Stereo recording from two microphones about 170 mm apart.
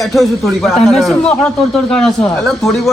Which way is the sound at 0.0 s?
Centre (ahead or behind).